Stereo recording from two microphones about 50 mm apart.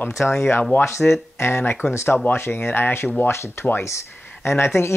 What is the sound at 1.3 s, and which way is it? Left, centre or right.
Speech, left.